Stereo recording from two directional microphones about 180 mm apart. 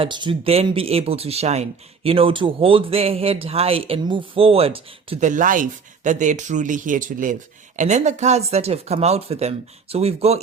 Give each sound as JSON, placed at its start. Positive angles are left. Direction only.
{"t": 0.0, "sound": "speech", "side_deg": -25}
{"t": 5.2, "sound": "speech", "side_deg": -45}